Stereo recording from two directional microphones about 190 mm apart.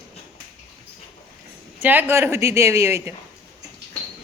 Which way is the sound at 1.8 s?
10° right (ahead or behind).